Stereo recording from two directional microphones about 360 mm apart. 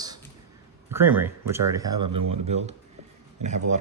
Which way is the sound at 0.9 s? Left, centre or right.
Centre.